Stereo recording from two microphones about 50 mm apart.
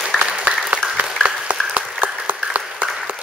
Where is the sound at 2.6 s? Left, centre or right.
Centre.